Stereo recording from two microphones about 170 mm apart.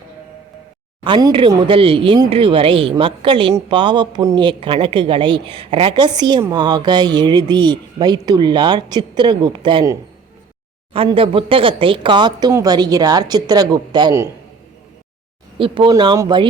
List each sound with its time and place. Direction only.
1.0 s speech: 30° right (ahead or behind)
15.5 s speech: 30° right (ahead or behind)